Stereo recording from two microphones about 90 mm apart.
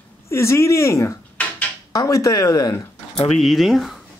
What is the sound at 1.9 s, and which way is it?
Speech, 40° left (ahead or behind).